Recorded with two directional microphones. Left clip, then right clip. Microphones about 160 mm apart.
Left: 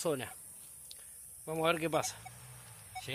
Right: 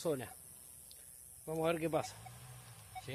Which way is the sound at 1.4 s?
20° left (ahead or behind).